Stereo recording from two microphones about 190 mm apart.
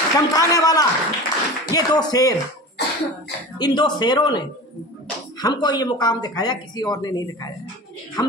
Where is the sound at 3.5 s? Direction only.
25° left (ahead or behind).